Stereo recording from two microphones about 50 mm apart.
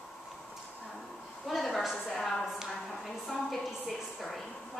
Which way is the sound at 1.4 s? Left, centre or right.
Centre.